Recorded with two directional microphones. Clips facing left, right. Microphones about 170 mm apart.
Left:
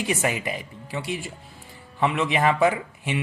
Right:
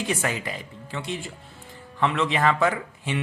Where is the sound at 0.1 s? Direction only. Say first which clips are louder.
Left 2 dB; 15° left (ahead or behind).